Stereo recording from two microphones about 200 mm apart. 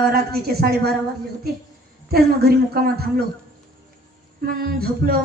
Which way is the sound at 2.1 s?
50° right (ahead or behind).